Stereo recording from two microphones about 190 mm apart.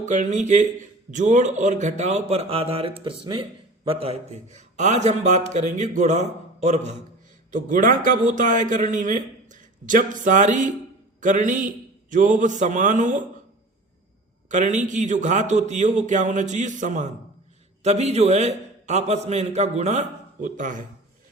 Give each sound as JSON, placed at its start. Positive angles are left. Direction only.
{"t": 0.0, "sound": "a man's voice", "side_deg": -40}
{"t": 14.5, "sound": "a man's voice", "side_deg": -40}